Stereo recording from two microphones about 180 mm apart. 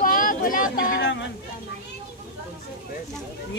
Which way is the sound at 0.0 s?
50° left (ahead or behind).